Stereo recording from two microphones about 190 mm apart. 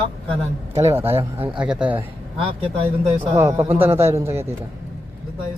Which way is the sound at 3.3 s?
15° right (ahead or behind).